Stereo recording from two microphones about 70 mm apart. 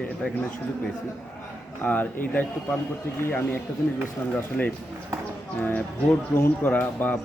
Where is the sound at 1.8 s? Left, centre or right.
Left.